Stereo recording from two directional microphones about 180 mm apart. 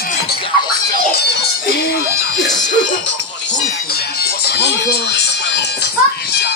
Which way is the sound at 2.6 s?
80° left.